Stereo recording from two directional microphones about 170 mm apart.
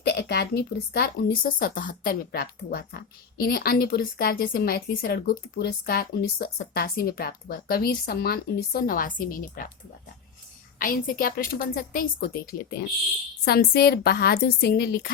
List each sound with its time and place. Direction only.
0.0 s speech: 75° left (ahead or behind); by 9.7 s 55° left (ahead or behind)
10.8 s speech: 55° left (ahead or behind)